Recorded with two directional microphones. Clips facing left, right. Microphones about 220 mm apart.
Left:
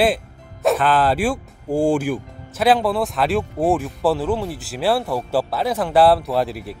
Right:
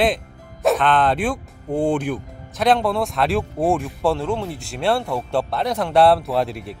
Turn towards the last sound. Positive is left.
turn(degrees=0)  # may be behind; listen again after turning